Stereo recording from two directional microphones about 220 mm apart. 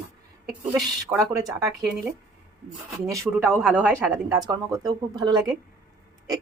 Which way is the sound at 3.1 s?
10° right (ahead or behind).